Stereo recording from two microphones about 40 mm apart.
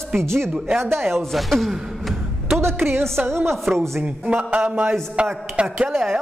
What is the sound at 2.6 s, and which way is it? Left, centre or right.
Music, right.